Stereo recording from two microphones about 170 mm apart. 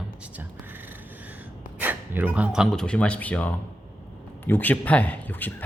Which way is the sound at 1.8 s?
10° right (ahead or behind).